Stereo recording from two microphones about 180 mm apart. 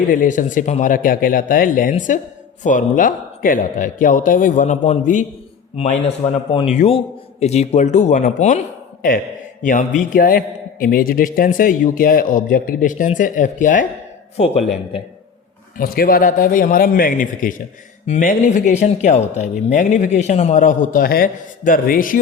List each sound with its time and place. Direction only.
0.1 s a man's voice: 50° left (ahead or behind)
14.3 s a man's voice: 35° left (ahead or behind)
15.8 s a man's voice: 55° left (ahead or behind)